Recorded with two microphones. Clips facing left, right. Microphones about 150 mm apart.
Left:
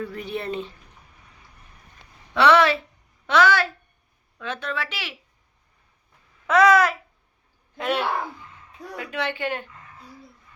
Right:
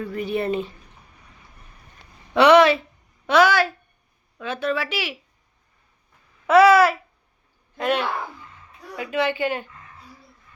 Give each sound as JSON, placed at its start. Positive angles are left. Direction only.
{"t": 0.0, "sound": "speech", "side_deg": -5}
{"t": 2.3, "sound": "a woman's voice", "side_deg": -15}
{"t": 6.5, "sound": "a woman's voice", "side_deg": -5}